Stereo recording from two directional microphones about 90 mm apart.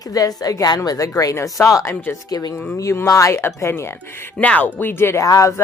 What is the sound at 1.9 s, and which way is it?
Speech, 20° left (ahead or behind).